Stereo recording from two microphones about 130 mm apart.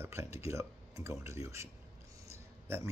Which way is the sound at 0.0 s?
20° right (ahead or behind).